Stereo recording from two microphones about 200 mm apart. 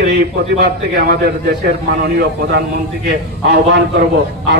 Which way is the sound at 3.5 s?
60° right (ahead or behind).